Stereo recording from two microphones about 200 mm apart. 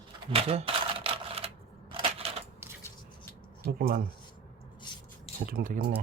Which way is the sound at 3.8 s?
45° right (ahead or behind).